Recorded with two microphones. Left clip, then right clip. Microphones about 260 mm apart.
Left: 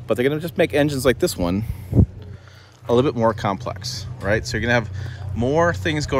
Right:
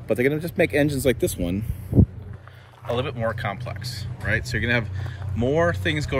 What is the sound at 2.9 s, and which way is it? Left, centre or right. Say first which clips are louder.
Speech: left 8 dB; centre.